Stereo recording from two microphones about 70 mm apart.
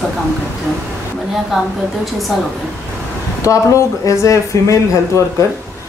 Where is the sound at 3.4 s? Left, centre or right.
Left.